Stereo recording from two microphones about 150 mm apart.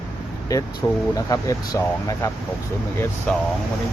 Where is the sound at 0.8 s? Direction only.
20° left (ahead or behind).